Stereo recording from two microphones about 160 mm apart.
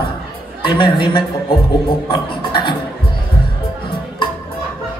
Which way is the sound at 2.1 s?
30° left (ahead or behind).